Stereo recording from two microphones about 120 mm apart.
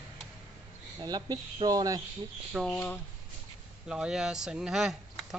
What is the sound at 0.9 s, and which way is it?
Speech, 35° right (ahead or behind).